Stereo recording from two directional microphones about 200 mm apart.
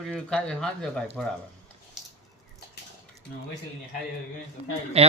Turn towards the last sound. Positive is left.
turn(degrees=-30)  # may be behind; listen again after turning